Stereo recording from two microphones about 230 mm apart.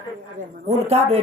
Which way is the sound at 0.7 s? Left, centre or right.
Right.